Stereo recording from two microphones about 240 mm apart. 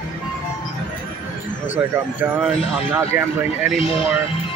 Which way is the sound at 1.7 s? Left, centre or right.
Centre.